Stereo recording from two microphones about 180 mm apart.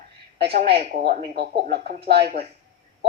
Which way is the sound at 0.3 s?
60° right (ahead or behind).